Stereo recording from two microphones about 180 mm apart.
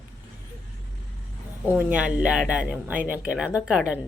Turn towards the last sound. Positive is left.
turn(degrees=-5)  # may be behind; listen again after turning